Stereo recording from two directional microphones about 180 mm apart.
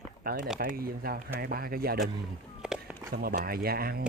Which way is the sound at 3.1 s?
55° right (ahead or behind).